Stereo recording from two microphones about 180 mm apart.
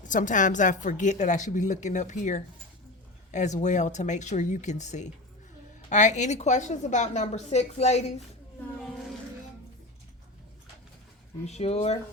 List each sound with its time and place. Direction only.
0.0 s a woman's voice: 45° left (ahead or behind)
11.4 s a woman's voice: 35° left (ahead or behind)